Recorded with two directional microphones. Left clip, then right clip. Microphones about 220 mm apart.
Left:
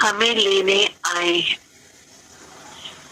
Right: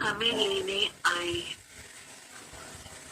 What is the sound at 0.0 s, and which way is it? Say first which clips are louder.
Speech: left 10 dB; 40° left (ahead or behind).